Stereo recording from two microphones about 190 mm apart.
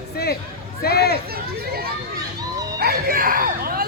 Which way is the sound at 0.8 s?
55° left (ahead or behind).